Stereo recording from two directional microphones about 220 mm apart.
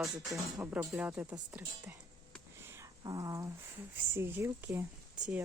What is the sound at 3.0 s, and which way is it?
Speech, 15° right (ahead or behind).